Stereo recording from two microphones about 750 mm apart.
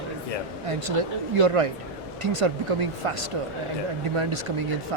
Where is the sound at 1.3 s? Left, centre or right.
Right.